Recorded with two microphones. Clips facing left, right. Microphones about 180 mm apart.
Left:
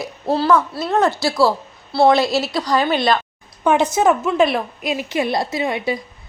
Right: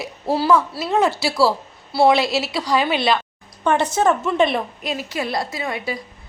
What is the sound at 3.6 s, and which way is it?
A woman's voice, 10° left (ahead or behind).